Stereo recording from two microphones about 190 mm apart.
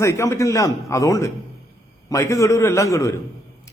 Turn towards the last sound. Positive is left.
turn(degrees=15)  # may be behind; listen again after turning